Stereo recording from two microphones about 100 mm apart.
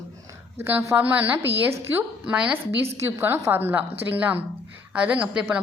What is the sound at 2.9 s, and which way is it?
A woman's voice, 25° right (ahead or behind).